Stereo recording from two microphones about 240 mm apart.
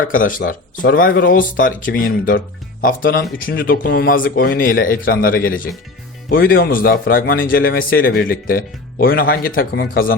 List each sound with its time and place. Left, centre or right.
0.0 s speech: left